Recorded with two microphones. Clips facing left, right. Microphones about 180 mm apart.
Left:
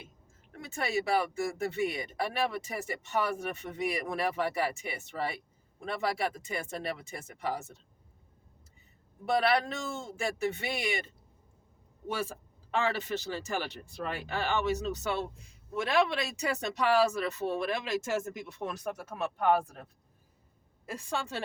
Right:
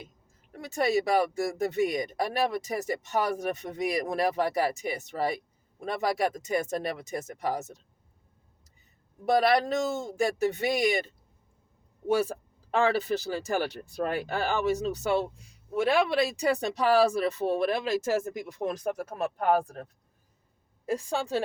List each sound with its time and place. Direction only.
0.7 s speech: 40° right (ahead or behind)
9.2 s speech: 40° right (ahead or behind)
12.7 s speech: 35° right (ahead or behind)
18.3 s speech: 15° right (ahead or behind)
18.8 s speech: 35° right (ahead or behind)
21.2 s speech: 40° right (ahead or behind)